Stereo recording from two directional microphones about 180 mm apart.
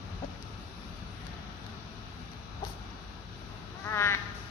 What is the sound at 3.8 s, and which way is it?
Quack, 15° left (ahead or behind).